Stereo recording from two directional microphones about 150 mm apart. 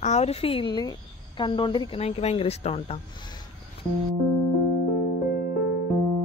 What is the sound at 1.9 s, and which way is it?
Speech, 45° left (ahead or behind).